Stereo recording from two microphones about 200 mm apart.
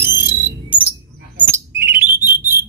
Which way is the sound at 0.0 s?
10° right (ahead or behind).